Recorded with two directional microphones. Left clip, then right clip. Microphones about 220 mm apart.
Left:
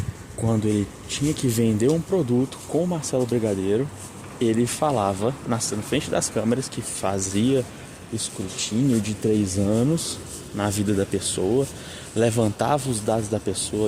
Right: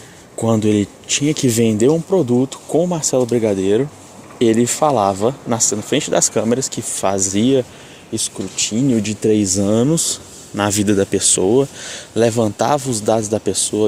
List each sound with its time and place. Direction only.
0.4 s speech: 35° right (ahead or behind)